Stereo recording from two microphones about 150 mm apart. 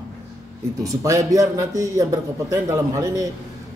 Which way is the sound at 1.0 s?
20° right (ahead or behind).